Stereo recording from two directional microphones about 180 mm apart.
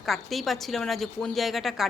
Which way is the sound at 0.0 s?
Centre (ahead or behind).